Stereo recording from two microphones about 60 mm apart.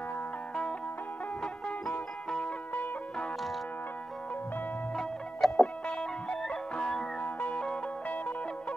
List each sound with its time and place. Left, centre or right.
1.4 s music: centre
2.4 s music: left
4.9 s music: centre
8.1 s music: left